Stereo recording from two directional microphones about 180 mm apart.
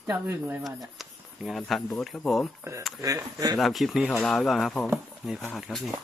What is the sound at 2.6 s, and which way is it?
Speech, 15° right (ahead or behind).